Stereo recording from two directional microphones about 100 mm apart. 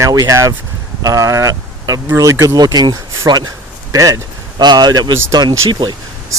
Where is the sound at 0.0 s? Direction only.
35° right (ahead or behind).